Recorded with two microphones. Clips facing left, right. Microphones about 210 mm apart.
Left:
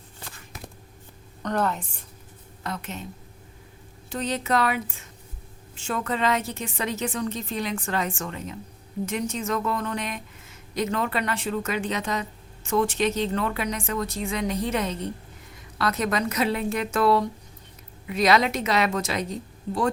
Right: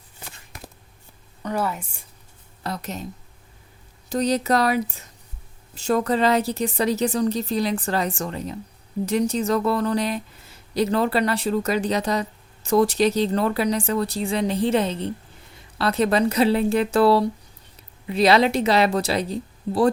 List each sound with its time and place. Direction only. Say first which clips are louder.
1.4 s a woman's voice: even; 10° right (ahead or behind)
2.6 s a woman's voice: right 3 dB; 35° right (ahead or behind)
4.1 s a woman's voice: right 5 dB; 40° right (ahead or behind)